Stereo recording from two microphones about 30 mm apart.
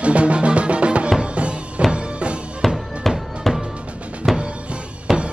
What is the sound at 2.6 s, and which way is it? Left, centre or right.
Music, centre.